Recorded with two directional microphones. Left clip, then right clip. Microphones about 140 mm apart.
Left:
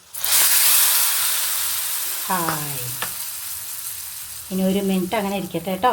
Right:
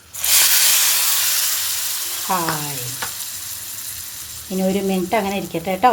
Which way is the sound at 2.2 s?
10° right (ahead or behind).